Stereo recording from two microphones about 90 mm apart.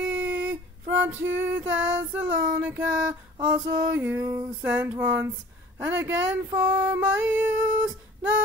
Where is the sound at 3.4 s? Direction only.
55° right (ahead or behind).